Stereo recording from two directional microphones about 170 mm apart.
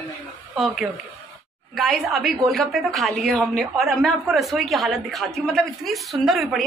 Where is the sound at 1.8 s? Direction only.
Centre (ahead or behind).